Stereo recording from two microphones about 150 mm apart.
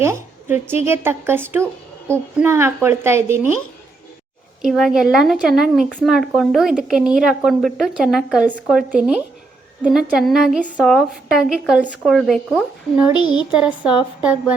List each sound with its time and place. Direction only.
0.0 s a woman's voice: 15° right (ahead or behind)
4.6 s a woman's voice: 5° right (ahead or behind)
13.1 s speech: 30° left (ahead or behind)